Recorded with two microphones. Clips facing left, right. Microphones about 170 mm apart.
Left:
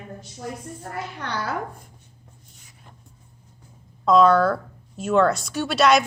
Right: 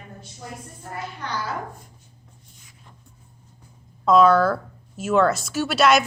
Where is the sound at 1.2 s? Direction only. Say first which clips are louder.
Even; 65° left (ahead or behind).